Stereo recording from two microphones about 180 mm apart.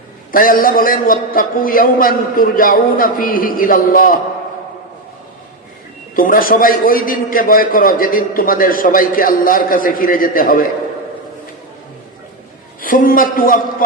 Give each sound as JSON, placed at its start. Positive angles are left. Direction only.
{"t": 0.3, "sound": "a man's voice", "side_deg": 50}
{"t": 6.1, "sound": "a man's voice", "side_deg": 50}
{"t": 12.8, "sound": "a man's voice", "side_deg": 50}